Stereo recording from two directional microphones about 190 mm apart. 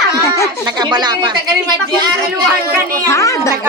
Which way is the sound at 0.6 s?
20° right (ahead or behind).